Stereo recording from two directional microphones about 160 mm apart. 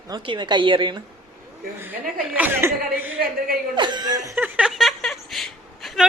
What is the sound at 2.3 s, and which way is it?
Speech, 10° right (ahead or behind).